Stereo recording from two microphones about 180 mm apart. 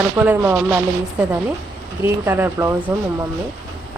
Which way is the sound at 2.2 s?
15° right (ahead or behind).